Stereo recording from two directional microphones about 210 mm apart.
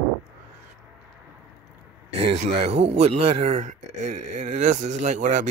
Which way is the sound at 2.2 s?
30° right (ahead or behind).